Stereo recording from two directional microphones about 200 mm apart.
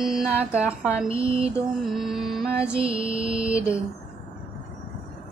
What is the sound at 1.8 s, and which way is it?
Music, centre (ahead or behind).